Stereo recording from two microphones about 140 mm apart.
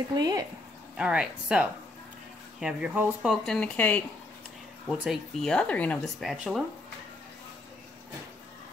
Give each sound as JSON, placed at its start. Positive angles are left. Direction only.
{"t": 0.1, "sound": "speech", "side_deg": -30}
{"t": 0.9, "sound": "speech", "side_deg": -5}
{"t": 3.2, "sound": "speech", "side_deg": 5}
{"t": 5.0, "sound": "speech", "side_deg": 0}